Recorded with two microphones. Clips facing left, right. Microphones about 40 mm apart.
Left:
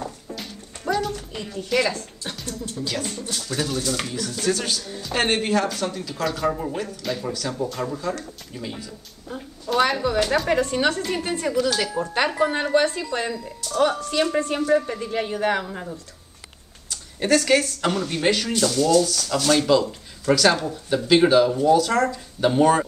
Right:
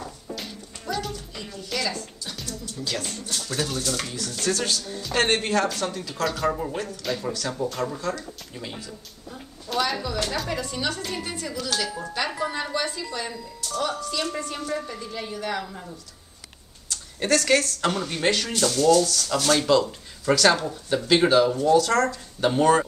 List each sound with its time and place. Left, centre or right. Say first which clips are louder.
0.4 s a sound: left 1 dB; centre
1.3 s a woman's voice: left 10 dB; left
2.8 s speech: left 2 dB; centre
9.8 s a woman's voice: left 5 dB; left
10.1 s a woman's voice: left 7 dB; centre
10.5 s a woman's voice: left 8 dB; left
13.7 s a woman's voice: left 7 dB; left
16.9 s speech: left 3 dB; centre